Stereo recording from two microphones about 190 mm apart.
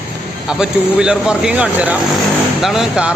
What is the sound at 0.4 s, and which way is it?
Speech, 5° right (ahead or behind).